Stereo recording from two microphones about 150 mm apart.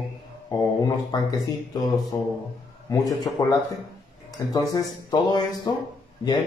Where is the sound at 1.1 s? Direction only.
25° left (ahead or behind).